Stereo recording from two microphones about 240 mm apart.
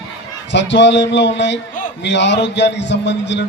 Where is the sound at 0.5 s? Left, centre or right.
Left.